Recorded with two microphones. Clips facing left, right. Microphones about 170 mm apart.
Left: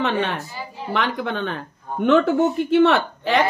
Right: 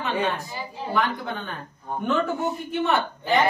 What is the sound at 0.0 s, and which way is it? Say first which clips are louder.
A woman's voice: left 3 dB; 80° left.